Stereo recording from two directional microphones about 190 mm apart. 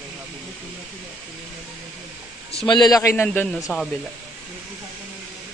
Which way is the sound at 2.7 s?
20° left (ahead or behind).